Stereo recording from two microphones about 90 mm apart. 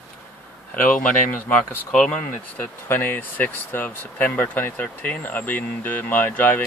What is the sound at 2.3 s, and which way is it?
Speech, 25° left (ahead or behind).